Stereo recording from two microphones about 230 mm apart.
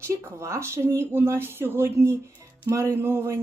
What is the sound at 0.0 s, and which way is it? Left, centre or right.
Speech, centre.